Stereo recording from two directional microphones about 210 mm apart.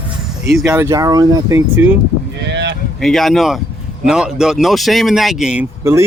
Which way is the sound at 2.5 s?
55° right (ahead or behind).